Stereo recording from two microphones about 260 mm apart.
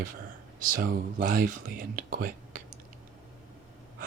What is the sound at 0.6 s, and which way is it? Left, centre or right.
Speech, right.